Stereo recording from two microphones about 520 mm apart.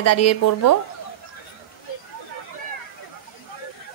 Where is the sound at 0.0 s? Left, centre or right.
Left.